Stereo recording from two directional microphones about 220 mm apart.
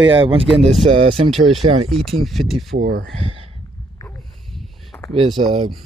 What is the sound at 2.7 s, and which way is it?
Speech, 40° right (ahead or behind).